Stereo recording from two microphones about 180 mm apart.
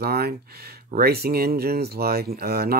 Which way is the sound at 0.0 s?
60° right (ahead or behind).